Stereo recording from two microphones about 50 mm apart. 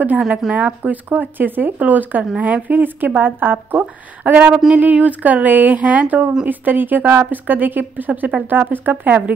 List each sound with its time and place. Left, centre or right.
0.5 s speech: right